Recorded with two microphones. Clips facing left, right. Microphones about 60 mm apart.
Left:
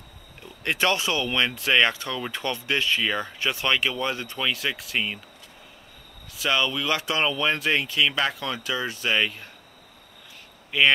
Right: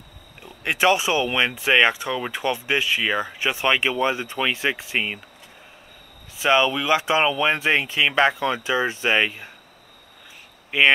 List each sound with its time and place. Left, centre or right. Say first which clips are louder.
0.4 s speech: right 4 dB; centre
6.3 s speech: right 6 dB; right
10.7 s speech: right 2 dB; centre